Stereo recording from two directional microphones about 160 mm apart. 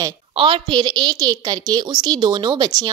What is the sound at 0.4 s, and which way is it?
A woman's voice, 30° right (ahead or behind).